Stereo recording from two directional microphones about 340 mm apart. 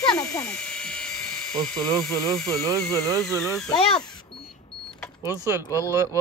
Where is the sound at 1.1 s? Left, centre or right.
Centre.